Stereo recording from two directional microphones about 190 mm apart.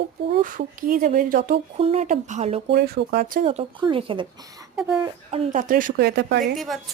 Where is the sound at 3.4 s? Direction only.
30° right (ahead or behind).